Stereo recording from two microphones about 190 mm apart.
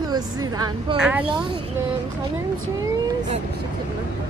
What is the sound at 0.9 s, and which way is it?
Speech, 5° right (ahead or behind).